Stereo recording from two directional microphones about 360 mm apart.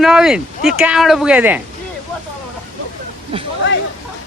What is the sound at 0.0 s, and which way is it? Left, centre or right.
Speech, centre.